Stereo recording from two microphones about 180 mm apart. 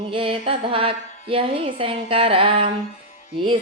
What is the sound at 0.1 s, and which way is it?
A woman's voice, 30° right (ahead or behind).